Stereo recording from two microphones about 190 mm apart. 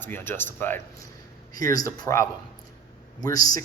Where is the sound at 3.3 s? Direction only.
20° left (ahead or behind).